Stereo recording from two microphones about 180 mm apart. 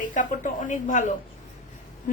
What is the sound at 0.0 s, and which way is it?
A woman's voice, 45° left (ahead or behind).